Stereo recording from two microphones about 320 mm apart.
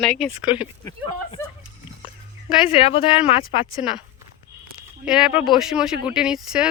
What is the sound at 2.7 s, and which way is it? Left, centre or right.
Speech, centre.